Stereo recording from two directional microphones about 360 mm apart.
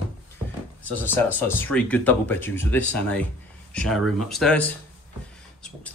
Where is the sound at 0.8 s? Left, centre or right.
Centre.